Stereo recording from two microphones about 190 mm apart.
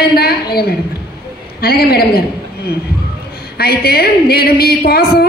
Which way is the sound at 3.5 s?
55° left (ahead or behind).